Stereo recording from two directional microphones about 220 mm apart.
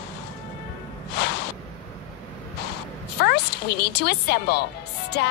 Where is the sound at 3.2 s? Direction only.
50° left (ahead or behind).